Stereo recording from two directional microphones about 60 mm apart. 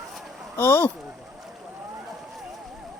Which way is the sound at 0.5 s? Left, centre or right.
Left.